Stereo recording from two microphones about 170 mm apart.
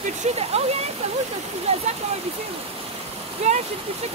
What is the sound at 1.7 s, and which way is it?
Speech, 35° right (ahead or behind).